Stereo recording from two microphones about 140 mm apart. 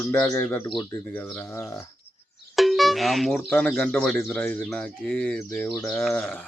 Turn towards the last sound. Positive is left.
turn(degrees=15)  # may be behind; listen again after turning